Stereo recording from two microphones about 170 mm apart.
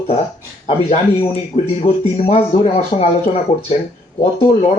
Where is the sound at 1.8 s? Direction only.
45° left (ahead or behind).